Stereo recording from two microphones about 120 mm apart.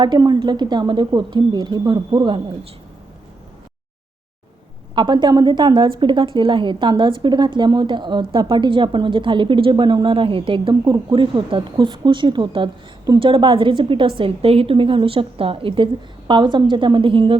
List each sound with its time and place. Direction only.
0.0 s a woman's voice: 35° right (ahead or behind)
4.9 s a woman's voice: 40° right (ahead or behind)